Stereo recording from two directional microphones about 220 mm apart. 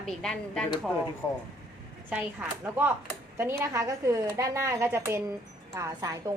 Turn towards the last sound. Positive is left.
turn(degrees=-15)  # may be behind; listen again after turning